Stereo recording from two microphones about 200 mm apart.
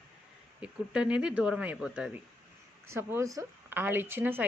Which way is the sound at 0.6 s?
5° right (ahead or behind).